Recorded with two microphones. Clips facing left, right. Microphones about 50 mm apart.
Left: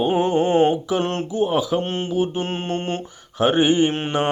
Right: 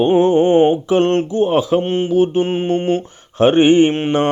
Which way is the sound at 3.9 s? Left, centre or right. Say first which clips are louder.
Right 6 dB; right.